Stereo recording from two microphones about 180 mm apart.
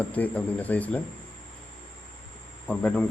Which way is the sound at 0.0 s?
10° left (ahead or behind).